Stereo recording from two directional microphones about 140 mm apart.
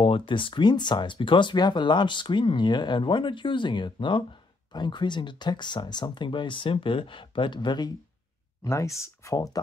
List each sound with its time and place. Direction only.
0.0 s speech: 40° left (ahead or behind)